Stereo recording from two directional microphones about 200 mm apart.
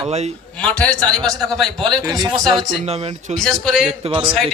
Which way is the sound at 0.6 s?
5° left (ahead or behind).